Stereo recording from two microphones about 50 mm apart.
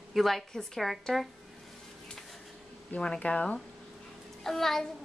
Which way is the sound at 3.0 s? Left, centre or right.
Left.